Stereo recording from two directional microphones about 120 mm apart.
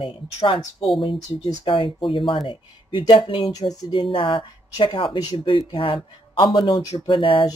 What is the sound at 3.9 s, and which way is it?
Speech, 45° left (ahead or behind).